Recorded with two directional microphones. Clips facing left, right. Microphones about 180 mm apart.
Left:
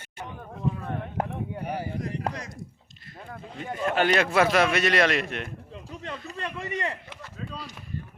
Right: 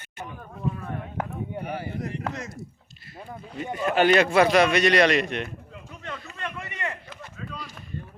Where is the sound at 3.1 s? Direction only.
5° right (ahead or behind).